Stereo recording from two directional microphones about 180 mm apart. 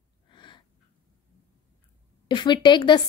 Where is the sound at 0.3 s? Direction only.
25° left (ahead or behind).